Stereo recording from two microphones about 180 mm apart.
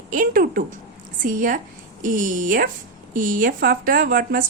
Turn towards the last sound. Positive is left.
turn(degrees=-50)  # may be behind; listen again after turning